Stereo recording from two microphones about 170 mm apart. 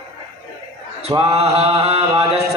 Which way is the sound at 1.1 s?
35° right (ahead or behind).